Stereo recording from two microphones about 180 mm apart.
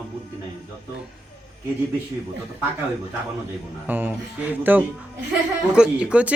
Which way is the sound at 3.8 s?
10° right (ahead or behind).